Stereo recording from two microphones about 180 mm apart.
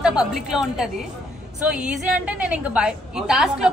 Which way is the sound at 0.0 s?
5° right (ahead or behind).